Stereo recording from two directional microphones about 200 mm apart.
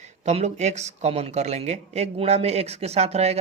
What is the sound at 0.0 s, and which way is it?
Speech, 35° right (ahead or behind).